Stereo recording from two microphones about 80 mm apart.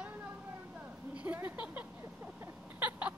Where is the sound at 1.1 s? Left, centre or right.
Centre.